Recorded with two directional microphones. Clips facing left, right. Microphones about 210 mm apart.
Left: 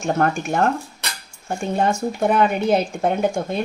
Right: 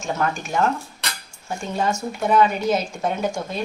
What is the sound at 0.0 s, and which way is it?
A woman's voice, 55° left (ahead or behind).